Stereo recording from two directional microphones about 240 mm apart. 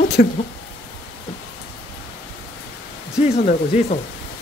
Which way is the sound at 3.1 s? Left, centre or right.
Left.